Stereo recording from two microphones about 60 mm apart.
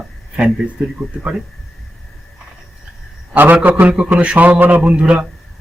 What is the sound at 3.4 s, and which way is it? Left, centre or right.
Speech, right.